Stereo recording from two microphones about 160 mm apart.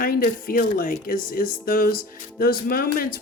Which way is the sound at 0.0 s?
65° left (ahead or behind).